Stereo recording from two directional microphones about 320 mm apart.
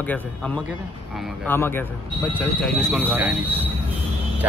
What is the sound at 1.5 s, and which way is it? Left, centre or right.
Speech, centre.